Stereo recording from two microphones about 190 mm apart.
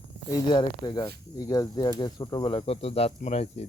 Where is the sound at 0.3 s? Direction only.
25° left (ahead or behind).